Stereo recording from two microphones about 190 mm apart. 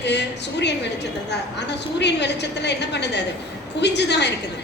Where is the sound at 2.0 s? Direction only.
65° left (ahead or behind).